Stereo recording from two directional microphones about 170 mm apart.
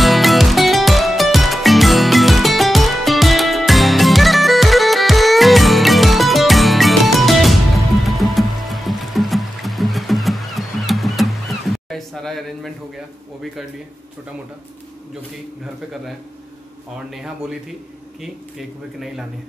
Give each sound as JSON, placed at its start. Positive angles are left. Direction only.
{"t": 0.0, "sound": "music", "side_deg": 0}
{"t": 15.6, "sound": "a man's voice", "side_deg": 0}